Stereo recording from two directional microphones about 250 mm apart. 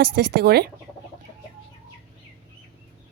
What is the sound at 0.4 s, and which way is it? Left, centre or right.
Speech, right.